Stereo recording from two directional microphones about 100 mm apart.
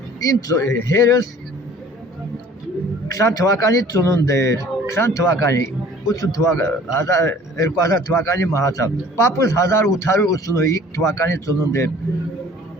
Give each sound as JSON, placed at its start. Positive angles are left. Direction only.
{"t": 0.2, "sound": "speech", "side_deg": 35}
{"t": 3.1, "sound": "a man's voice", "side_deg": 35}